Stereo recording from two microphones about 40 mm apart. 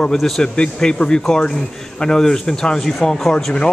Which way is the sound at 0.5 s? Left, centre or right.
Left.